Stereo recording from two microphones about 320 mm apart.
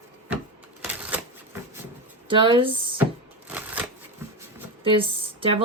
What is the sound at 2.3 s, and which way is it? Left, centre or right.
Speech, centre.